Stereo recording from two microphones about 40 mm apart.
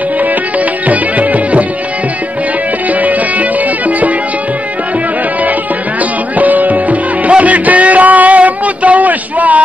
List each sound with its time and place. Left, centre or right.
0.8 s music: right
2.9 s music: right
6.3 s music: right